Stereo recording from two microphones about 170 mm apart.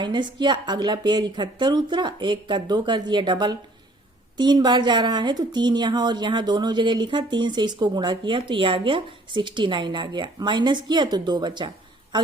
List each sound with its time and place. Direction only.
0.0 s speech: 25° right (ahead or behind)